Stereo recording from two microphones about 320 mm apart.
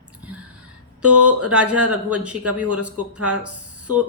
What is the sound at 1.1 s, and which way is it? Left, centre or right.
Speech, right.